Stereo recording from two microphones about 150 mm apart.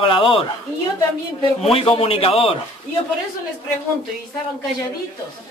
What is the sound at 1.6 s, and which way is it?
Speech, 40° left (ahead or behind).